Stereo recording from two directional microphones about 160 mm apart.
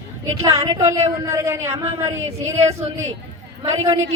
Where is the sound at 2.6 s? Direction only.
40° right (ahead or behind).